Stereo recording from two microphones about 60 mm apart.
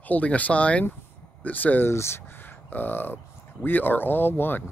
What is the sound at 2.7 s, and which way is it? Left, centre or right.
Speech, left.